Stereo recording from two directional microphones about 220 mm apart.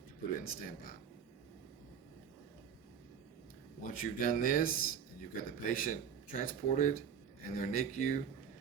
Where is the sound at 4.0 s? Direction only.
40° left (ahead or behind).